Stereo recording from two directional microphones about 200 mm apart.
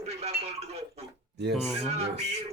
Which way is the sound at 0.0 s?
30° right (ahead or behind).